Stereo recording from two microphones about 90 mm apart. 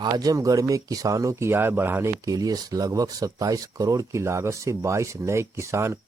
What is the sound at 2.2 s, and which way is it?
Speech, 45° right (ahead or behind).